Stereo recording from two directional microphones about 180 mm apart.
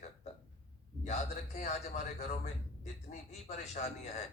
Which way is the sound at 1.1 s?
40° left (ahead or behind).